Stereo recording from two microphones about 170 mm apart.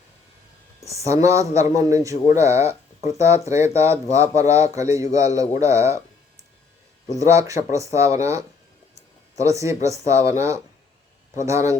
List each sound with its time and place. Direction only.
1.2 s a man's voice: 20° right (ahead or behind)
7.2 s a man's voice: 20° right (ahead or behind)